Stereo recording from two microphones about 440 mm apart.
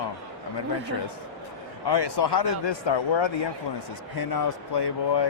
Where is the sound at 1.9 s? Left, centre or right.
Left.